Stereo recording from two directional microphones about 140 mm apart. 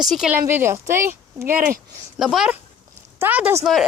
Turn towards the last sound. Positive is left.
turn(degrees=-15)  # may be behind; listen again after turning